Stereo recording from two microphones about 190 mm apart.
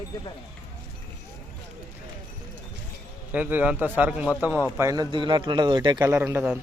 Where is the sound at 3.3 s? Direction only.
10° right (ahead or behind).